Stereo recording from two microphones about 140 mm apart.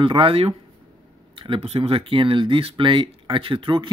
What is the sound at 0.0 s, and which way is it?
Speech, 40° right (ahead or behind).